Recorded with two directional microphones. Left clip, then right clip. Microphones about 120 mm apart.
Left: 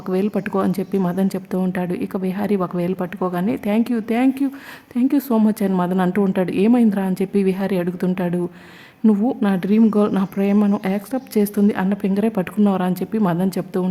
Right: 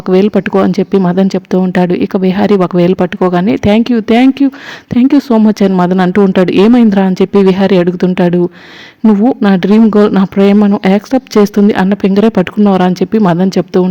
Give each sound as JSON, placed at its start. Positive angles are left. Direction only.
{"t": 0.0, "sound": "speech", "side_deg": -50}
{"t": 1.7, "sound": "a woman's voice", "side_deg": -50}